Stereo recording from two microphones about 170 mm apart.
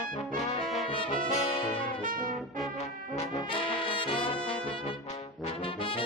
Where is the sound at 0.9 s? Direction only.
30° left (ahead or behind).